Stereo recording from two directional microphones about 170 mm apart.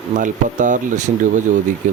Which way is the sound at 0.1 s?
50° right (ahead or behind).